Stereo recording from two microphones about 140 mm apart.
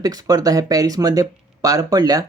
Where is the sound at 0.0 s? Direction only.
25° right (ahead or behind).